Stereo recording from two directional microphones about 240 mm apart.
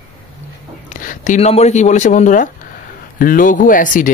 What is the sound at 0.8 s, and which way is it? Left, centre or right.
Speech, left.